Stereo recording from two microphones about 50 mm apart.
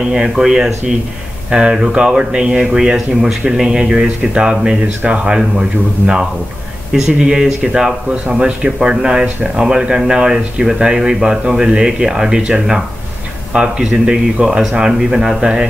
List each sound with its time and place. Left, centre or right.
0.0 s speech: centre